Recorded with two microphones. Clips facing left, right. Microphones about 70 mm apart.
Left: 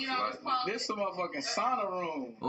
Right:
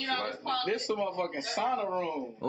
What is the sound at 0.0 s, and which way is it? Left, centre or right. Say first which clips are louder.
Speech: even; left.